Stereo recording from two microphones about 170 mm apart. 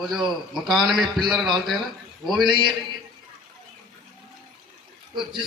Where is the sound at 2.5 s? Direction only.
25° right (ahead or behind).